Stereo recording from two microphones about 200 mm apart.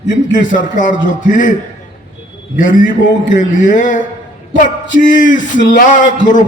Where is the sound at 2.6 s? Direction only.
40° left (ahead or behind).